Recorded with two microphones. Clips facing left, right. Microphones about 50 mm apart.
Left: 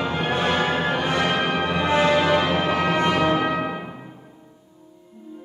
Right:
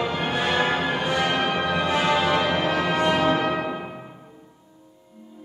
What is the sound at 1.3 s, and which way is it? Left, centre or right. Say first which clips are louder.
Music: left 1 dB; centre.